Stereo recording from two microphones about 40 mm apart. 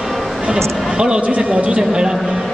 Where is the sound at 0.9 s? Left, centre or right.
Right.